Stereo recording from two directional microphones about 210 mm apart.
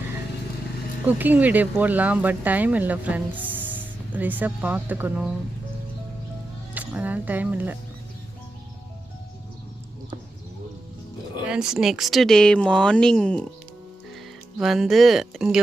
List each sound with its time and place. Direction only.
1.0 s speech: 10° right (ahead or behind)
6.7 s speech: 10° right (ahead or behind)
11.4 s speech: 5° right (ahead or behind)
14.6 s speech: centre (ahead or behind)